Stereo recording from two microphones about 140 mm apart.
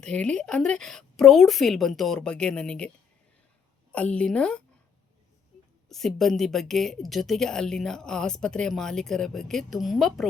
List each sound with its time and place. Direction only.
0.0 s speech: 5° left (ahead or behind)
3.9 s a woman's voice: 10° left (ahead or behind)
5.9 s speech: centre (ahead or behind)